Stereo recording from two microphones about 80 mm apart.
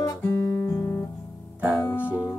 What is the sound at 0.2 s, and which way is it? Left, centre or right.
Guitar, left.